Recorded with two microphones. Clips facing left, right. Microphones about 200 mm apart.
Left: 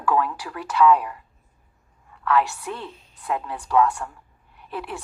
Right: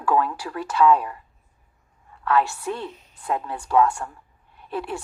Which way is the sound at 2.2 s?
30° right (ahead or behind).